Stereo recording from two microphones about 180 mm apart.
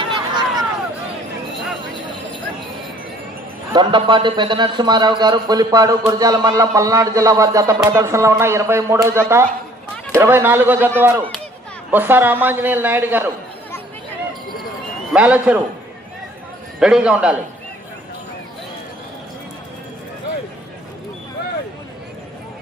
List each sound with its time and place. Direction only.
0.0 s a sound: 25° right (ahead or behind)
3.7 s a man's voice: 25° right (ahead or behind); by 13.2 s 10° right (ahead or behind)
15.1 s a man's voice: 5° right (ahead or behind)
16.8 s a man's voice: 5° right (ahead or behind)